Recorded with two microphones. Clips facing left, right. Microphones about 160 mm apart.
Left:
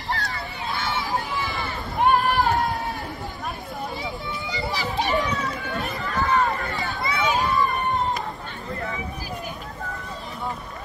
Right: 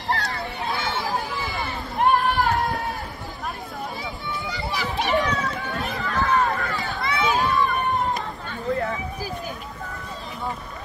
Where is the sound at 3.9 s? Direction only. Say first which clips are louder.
Left 1 dB; 25° left (ahead or behind).